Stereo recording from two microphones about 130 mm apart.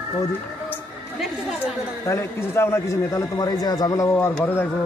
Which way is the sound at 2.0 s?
20° left (ahead or behind).